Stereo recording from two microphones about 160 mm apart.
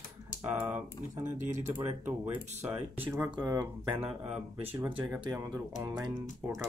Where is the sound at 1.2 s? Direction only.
50° right (ahead or behind).